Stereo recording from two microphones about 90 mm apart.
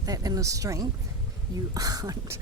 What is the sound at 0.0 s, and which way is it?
A woman's voice, 40° right (ahead or behind).